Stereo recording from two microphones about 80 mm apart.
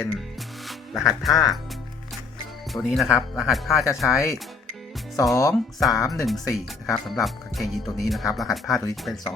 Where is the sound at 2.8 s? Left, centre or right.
Left.